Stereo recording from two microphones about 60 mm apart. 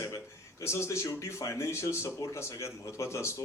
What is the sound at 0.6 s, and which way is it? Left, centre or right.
Speech, left.